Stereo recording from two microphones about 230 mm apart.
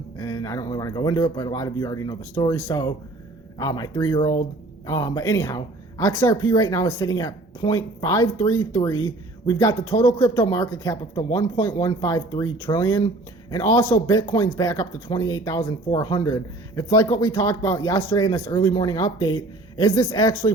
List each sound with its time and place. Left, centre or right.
0.2 s speech: centre